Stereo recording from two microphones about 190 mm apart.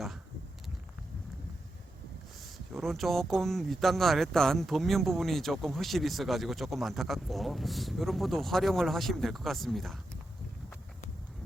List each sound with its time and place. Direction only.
2.7 s speech: centre (ahead or behind)